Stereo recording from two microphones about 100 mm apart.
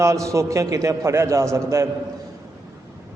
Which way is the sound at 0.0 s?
30° right (ahead or behind).